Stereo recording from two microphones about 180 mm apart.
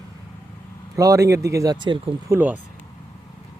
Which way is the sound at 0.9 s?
15° right (ahead or behind).